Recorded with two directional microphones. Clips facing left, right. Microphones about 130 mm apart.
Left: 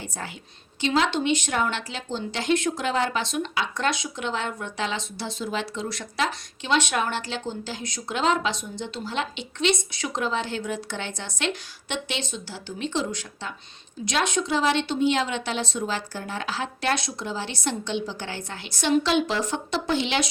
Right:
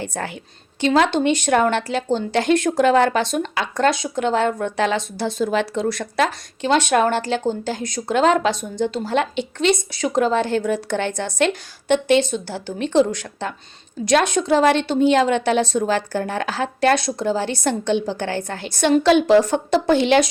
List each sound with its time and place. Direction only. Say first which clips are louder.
0.1 s speech: right 7 dB; 65° right (ahead or behind)
0.8 s speech: right 6 dB; 50° right (ahead or behind)